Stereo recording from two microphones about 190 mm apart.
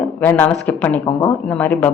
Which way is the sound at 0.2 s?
10° left (ahead or behind).